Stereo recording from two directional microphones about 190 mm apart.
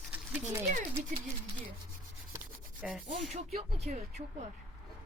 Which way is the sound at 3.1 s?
30° right (ahead or behind).